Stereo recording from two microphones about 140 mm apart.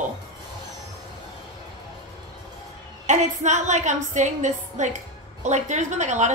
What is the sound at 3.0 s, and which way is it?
A woman's voice, 55° right (ahead or behind).